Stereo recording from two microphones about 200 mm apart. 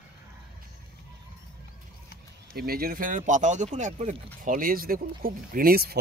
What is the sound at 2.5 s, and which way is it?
Speech, 50° right (ahead or behind).